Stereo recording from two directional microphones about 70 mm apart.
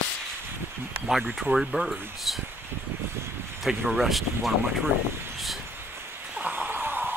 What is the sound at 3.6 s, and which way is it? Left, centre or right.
Speech, centre.